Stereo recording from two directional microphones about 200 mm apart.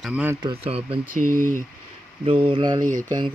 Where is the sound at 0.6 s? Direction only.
30° right (ahead or behind).